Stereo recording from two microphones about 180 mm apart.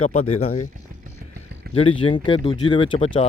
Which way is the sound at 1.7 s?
30° left (ahead or behind).